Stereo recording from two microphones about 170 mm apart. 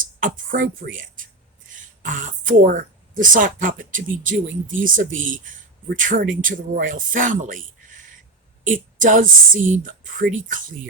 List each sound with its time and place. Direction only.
0.0 s speech: 55° right (ahead or behind)